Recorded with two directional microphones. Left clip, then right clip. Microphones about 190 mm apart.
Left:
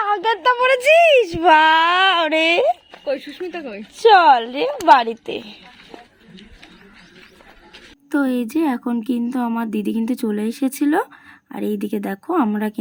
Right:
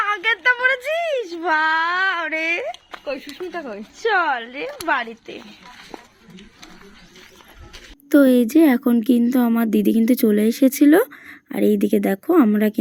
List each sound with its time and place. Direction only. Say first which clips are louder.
0.0 s a sound: left 1 dB; 15° left (ahead or behind)
0.4 s speech: left 2 dB; 40° left (ahead or behind)
0.8 s speech: left 11 dB; 65° left (ahead or behind)
3.0 s speech: left 4 dB; 40° left (ahead or behind); by 5.4 s 55° left (ahead or behind)
8.1 s speech: right 6 dB; 15° right (ahead or behind)